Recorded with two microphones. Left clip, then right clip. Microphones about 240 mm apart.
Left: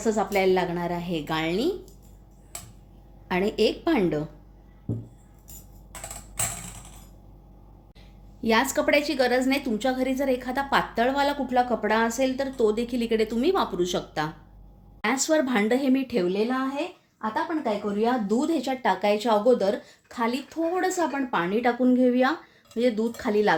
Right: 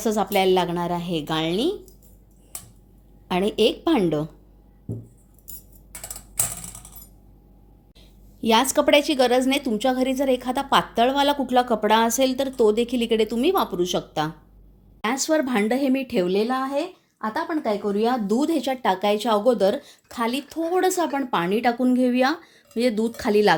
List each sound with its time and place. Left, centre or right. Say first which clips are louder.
0.0 s a woman's voice: right 2 dB; right
3.2 s a woman's voice: right 3 dB; right
8.4 s a woman's voice: right 4 dB; right